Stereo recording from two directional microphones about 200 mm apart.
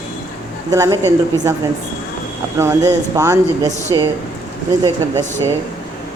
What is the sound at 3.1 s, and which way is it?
Speech, 15° right (ahead or behind).